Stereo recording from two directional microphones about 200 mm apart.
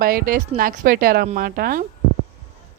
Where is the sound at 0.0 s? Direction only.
45° right (ahead or behind).